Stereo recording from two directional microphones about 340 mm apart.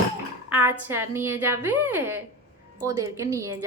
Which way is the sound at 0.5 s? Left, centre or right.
Centre.